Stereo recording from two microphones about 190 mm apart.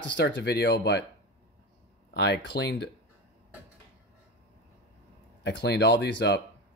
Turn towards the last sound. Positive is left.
turn(degrees=65)  # may be behind; listen again after turning